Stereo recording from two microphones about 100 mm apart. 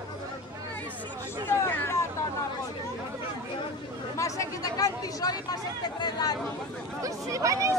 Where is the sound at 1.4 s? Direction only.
25° left (ahead or behind).